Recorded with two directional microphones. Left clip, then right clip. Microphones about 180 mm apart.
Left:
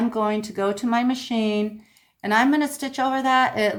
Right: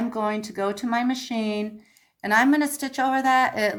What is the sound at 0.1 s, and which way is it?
A woman's voice, 25° right (ahead or behind).